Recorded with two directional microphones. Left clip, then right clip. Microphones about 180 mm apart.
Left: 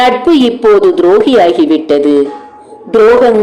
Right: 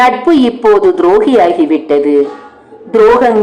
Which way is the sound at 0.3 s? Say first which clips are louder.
Left 1 dB; 20° left (ahead or behind).